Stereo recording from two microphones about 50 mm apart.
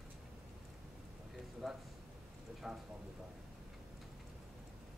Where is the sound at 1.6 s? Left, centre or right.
Centre.